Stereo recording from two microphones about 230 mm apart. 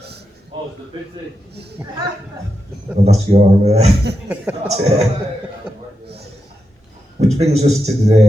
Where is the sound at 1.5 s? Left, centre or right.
Right.